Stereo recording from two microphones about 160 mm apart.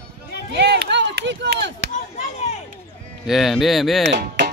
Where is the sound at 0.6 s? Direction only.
90° right.